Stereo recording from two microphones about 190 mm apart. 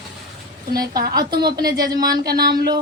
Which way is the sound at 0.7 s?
50° right (ahead or behind).